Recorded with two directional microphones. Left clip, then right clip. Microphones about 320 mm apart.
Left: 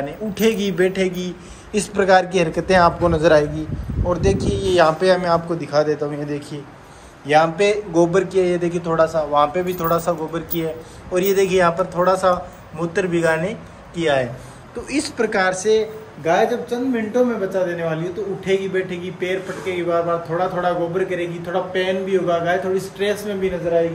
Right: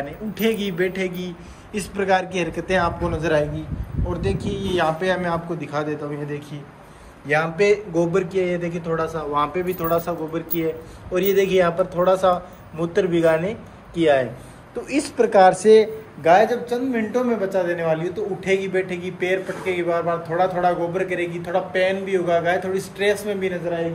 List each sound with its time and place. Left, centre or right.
0.3 s a man's voice: centre
4.4 s speech: left
4.7 s a man's voice: centre
7.2 s a man's voice: centre
15.6 s speech: centre
16.3 s a man's voice: centre